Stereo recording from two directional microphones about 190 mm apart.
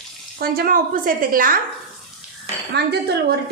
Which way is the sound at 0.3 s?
55° right (ahead or behind).